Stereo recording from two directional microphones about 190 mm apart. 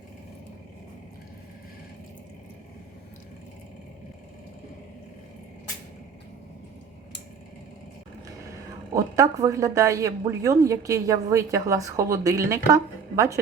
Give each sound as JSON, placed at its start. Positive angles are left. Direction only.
{"t": 9.0, "sound": "a woman's voice", "side_deg": -15}